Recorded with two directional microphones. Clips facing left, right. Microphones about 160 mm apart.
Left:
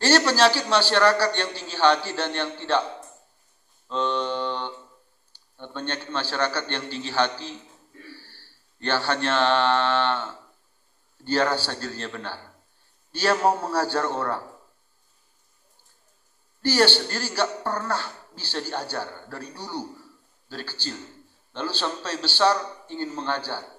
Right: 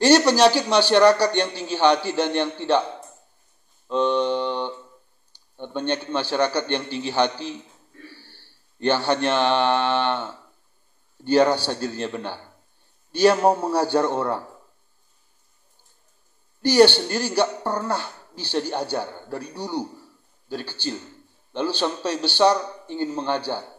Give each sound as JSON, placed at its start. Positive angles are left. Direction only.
{"t": 0.0, "sound": "speech", "side_deg": -15}
{"t": 3.9, "sound": "speech", "side_deg": -15}
{"t": 8.1, "sound": "mantra", "side_deg": -20}
{"t": 11.2, "sound": "speech", "side_deg": -15}
{"t": 16.6, "sound": "speech", "side_deg": -15}